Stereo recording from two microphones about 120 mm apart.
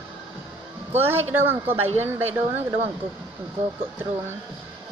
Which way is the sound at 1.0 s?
20° right (ahead or behind).